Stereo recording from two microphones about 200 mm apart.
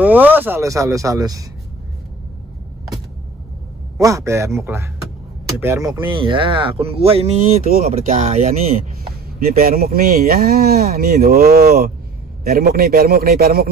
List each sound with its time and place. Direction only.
0.0 s speech: 10° right (ahead or behind)
4.0 s speech: 15° right (ahead or behind)
5.9 s speech: 25° right (ahead or behind)
9.4 s speech: 45° right (ahead or behind)